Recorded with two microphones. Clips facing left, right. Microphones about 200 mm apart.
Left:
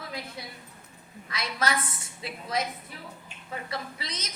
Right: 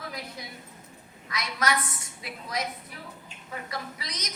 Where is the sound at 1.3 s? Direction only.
30° left (ahead or behind).